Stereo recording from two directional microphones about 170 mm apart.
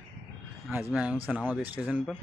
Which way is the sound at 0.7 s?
10° right (ahead or behind).